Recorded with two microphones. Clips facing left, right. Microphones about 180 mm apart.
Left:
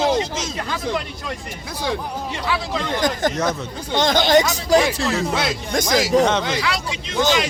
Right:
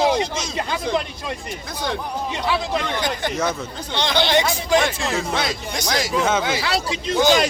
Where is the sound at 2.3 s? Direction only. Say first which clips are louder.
Right 2 dB; 15° right (ahead or behind).